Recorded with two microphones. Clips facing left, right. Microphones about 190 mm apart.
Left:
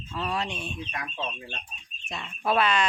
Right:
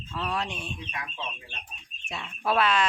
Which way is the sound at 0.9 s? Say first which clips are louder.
Left 3 dB; 45° left (ahead or behind).